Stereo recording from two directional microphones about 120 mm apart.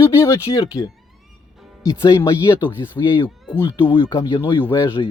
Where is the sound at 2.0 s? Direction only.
25° left (ahead or behind).